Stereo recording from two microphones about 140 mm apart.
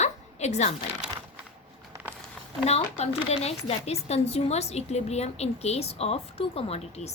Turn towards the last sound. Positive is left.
turn(degrees=50)  # may be behind; listen again after turning